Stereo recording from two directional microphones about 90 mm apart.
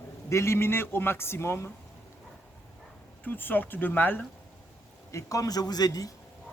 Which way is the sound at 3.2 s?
20° left (ahead or behind).